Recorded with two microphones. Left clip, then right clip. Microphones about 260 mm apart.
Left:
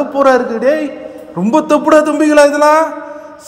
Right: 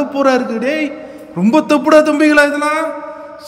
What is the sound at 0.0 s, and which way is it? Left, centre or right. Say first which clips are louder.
A man's voice: left 3 dB; centre.